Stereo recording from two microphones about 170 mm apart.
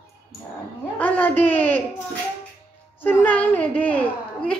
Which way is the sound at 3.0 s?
10° left (ahead or behind).